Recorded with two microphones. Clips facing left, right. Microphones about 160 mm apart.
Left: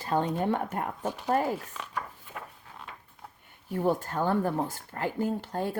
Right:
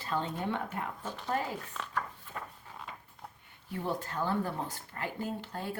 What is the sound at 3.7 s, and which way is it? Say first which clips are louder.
Speech: left 7 dB; 45° left (ahead or behind).